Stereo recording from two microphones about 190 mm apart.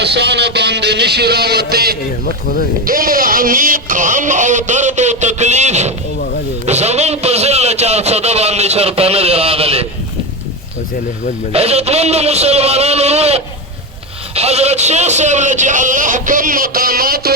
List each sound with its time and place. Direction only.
0.0 s speech: 65° right (ahead or behind); by 5.9 s 35° right (ahead or behind)
6.7 s a sound: 35° right (ahead or behind)
11.5 s a man's voice: 35° right (ahead or behind); by 17.3 s 50° right (ahead or behind)